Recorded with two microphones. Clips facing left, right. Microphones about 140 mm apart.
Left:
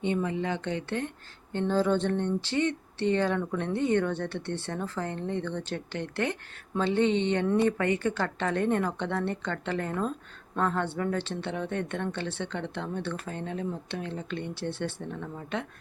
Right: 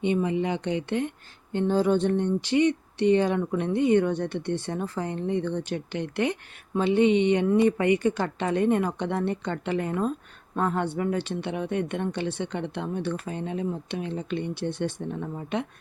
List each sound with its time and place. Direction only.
0.0 s speech: 15° right (ahead or behind)